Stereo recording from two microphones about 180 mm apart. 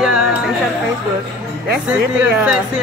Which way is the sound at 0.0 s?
5° right (ahead or behind).